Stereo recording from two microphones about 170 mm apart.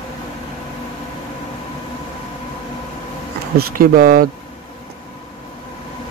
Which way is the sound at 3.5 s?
60° right (ahead or behind).